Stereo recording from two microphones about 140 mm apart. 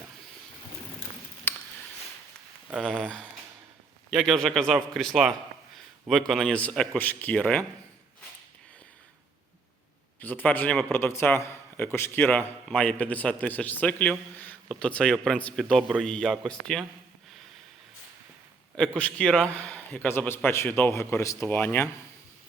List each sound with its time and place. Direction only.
2.6 s speech: 10° right (ahead or behind)
4.1 s a man's voice: centre (ahead or behind)
10.2 s a man's voice: 15° left (ahead or behind)
18.8 s a man's voice: 5° left (ahead or behind)